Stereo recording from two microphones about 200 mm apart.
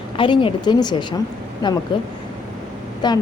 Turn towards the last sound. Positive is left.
turn(degrees=20)  # may be behind; listen again after turning